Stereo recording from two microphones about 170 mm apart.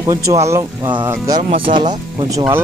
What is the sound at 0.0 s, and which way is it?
Speech, 20° right (ahead or behind).